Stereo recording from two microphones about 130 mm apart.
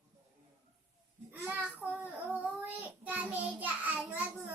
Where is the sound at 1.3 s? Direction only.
15° right (ahead or behind).